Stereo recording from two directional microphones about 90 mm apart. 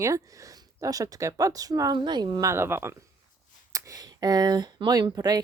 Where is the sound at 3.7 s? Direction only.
40° right (ahead or behind).